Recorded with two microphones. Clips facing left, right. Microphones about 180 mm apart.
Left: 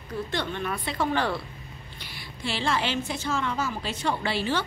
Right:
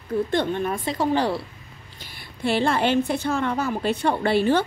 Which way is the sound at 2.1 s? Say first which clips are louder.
Right 9 dB; 55° right (ahead or behind).